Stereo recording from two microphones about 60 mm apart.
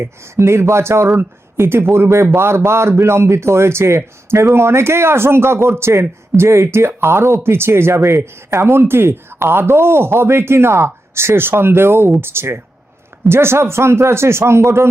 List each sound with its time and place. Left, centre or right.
0.0 s a man's voice: right